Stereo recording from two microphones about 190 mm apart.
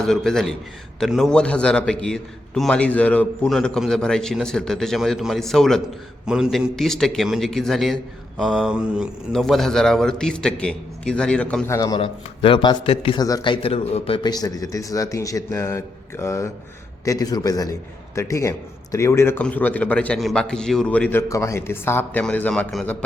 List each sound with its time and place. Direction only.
0.0 s a man's voice: centre (ahead or behind)
11.9 s a man's voice: 30° left (ahead or behind); by 23.0 s 5° left (ahead or behind)